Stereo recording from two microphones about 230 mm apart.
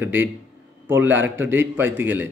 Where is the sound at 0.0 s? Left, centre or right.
Centre.